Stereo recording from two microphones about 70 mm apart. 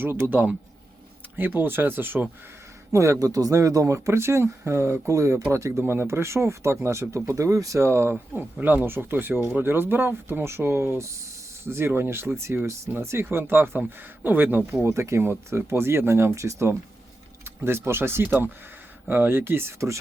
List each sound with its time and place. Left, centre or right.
0.0 s speech: right
2.9 s speech: right
7.9 s speech: right
14.8 s speech: right